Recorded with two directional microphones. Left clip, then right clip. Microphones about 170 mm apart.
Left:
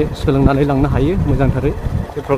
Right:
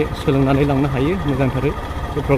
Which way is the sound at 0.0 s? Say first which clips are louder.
Left 2 dB; 25° left (ahead or behind).